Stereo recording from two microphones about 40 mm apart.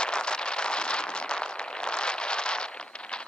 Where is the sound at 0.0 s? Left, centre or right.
Left.